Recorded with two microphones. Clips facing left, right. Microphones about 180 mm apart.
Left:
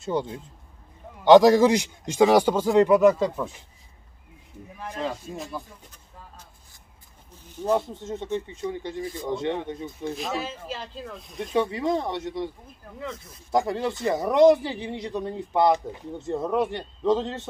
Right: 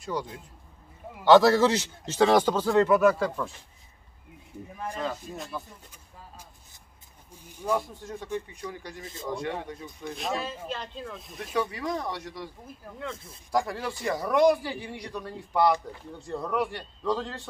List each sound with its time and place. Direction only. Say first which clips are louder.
0.0 s a man's voice: left 5 dB; 25° left (ahead or behind)
7.3 s a sound: left 7 dB; 10° right (ahead or behind)
7.7 s a man's voice: left 4 dB; 25° left (ahead or behind)
10.1 s speech: left 1 dB; centre (ahead or behind)
11.5 s a man's voice: left 5 dB; 25° left (ahead or behind)
13.5 s a man's voice: left 4 dB; 20° left (ahead or behind)